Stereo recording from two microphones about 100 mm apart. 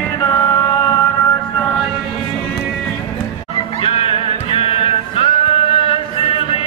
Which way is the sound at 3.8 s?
70° left (ahead or behind).